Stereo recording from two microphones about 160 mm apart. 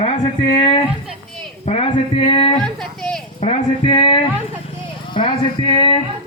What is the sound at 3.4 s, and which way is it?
Speech, 35° left (ahead or behind).